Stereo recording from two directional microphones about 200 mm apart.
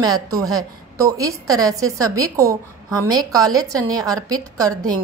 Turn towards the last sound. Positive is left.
turn(degrees=-15)  # may be behind; listen again after turning